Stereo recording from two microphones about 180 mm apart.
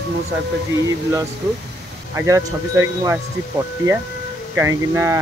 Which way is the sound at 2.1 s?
15° right (ahead or behind).